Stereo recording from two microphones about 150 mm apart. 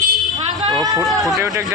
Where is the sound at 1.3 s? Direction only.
20° right (ahead or behind).